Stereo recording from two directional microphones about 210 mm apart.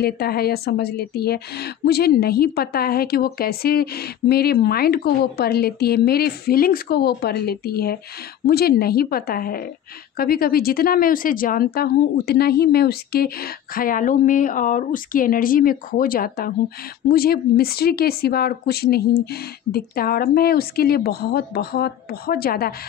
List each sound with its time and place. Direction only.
0.0 s speech: 45° left (ahead or behind)